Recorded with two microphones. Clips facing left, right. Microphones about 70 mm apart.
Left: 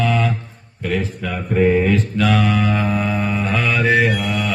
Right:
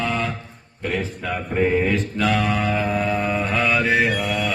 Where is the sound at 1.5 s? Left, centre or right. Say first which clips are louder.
Left 5 dB; centre.